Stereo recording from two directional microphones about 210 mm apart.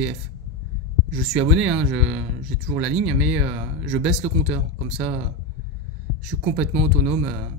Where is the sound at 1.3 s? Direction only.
5° right (ahead or behind).